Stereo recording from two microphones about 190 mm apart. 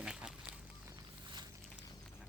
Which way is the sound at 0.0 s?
5° right (ahead or behind).